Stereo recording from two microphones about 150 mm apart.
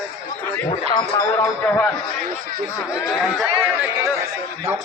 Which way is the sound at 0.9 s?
25° left (ahead or behind).